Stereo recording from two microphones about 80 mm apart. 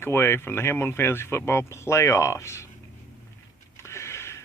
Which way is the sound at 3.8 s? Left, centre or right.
Left.